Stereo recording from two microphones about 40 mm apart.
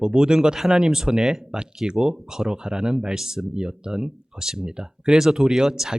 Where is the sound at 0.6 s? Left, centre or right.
Centre.